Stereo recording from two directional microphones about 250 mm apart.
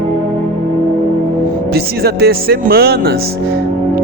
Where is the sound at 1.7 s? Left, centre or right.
Right.